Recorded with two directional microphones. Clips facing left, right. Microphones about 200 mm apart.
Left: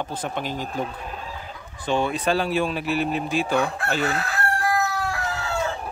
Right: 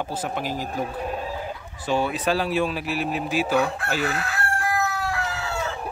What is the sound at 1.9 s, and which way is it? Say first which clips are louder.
Speech: left 1 dB; 5° right (ahead or behind).